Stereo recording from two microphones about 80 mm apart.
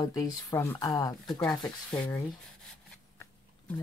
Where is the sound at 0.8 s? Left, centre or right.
Left.